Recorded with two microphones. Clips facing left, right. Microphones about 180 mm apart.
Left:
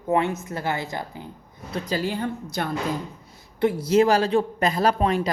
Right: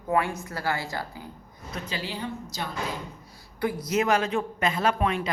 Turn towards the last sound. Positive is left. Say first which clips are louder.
# left 4 dB
turn(degrees=35)  # may be behind; listen again after turning